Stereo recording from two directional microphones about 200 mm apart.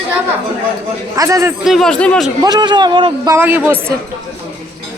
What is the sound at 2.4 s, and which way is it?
Speech, 20° right (ahead or behind).